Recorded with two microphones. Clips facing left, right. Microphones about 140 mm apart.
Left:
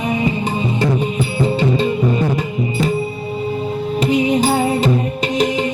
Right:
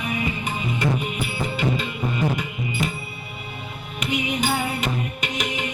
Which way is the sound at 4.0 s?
30° left (ahead or behind).